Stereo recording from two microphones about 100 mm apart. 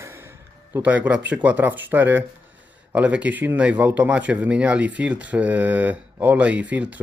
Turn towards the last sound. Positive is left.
turn(degrees=-15)  # may be behind; listen again after turning